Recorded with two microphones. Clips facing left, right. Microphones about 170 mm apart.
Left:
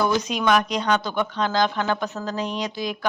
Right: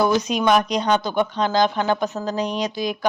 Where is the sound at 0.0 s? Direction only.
20° right (ahead or behind).